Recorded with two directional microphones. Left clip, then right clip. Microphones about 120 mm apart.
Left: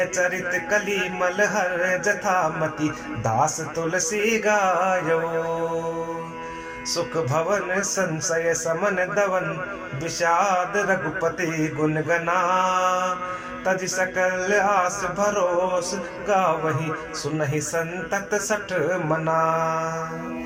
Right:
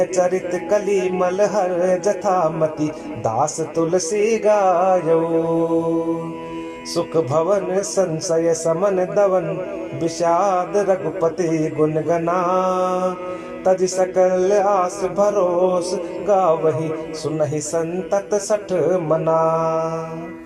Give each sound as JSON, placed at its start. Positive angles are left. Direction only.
{"t": 0.0, "sound": "speech", "side_deg": -35}
{"t": 6.9, "sound": "speech", "side_deg": -30}